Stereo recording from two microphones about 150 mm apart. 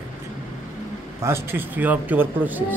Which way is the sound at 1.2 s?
15° right (ahead or behind).